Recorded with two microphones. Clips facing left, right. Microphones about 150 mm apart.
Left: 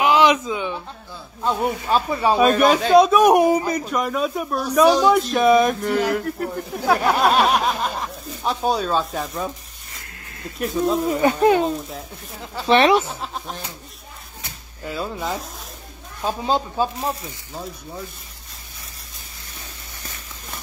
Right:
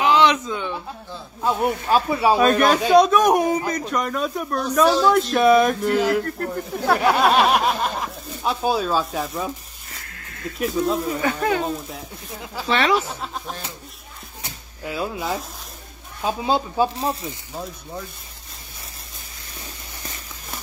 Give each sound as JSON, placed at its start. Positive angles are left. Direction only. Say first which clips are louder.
{"t": 0.0, "sound": "a sound", "louder": "left 1 dB", "side_deg": 10}
{"t": 1.4, "sound": "speech", "louder": "right 1 dB", "side_deg": 0}
{"t": 5.1, "sound": "speech", "louder": "even", "side_deg": 0}
{"t": 11.1, "sound": "speech", "louder": "left 6 dB", "side_deg": 25}
{"t": 11.9, "sound": "speech", "louder": "even", "side_deg": -5}
{"t": 12.6, "sound": "speech", "louder": "left 6 dB", "side_deg": 20}
{"t": 12.9, "sound": "speech", "louder": "left 3 dB", "side_deg": 0}
{"t": 14.9, "sound": "speech", "louder": "right 1 dB", "side_deg": -5}
{"t": 17.0, "sound": "speech", "louder": "right 1 dB", "side_deg": -30}